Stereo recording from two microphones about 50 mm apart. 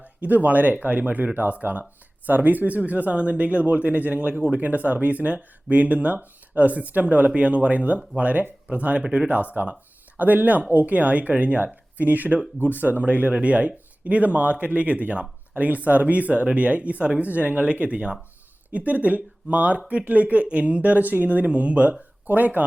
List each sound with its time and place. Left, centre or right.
0.0 s speech: right
13.0 s speech: right